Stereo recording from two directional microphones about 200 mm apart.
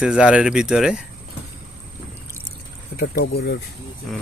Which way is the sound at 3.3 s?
50° left (ahead or behind).